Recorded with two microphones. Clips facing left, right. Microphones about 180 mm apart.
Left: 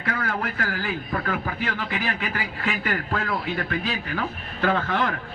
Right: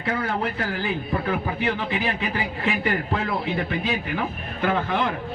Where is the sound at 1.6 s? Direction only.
25° right (ahead or behind).